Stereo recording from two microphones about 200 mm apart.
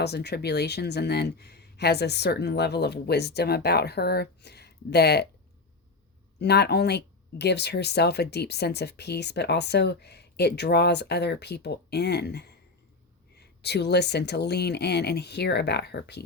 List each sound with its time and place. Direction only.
0.0 s speech: 55° left (ahead or behind)
6.4 s speech: 55° left (ahead or behind)